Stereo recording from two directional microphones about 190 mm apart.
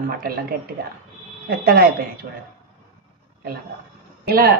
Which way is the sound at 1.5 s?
50° right (ahead or behind).